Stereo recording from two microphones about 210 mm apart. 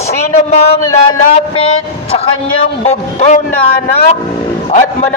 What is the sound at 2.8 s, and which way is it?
Speech, 35° left (ahead or behind).